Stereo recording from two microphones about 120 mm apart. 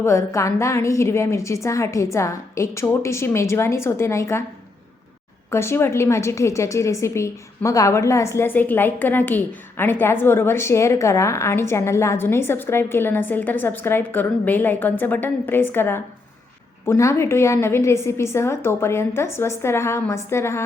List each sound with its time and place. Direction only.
0.0 s a woman's voice: 25° left (ahead or behind)
5.5 s a woman's voice: 20° left (ahead or behind)